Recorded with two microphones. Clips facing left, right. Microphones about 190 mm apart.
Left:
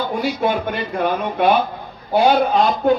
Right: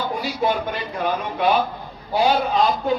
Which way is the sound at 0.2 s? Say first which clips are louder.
Left 3 dB; 55° left (ahead or behind).